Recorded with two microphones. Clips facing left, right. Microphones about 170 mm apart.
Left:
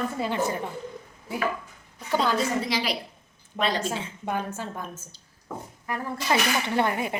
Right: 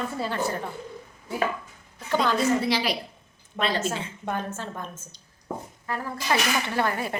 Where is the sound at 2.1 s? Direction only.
10° left (ahead or behind).